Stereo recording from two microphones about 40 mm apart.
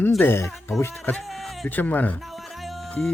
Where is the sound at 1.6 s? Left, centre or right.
Left.